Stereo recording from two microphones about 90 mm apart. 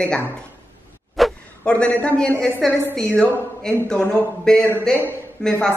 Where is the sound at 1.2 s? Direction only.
Centre (ahead or behind).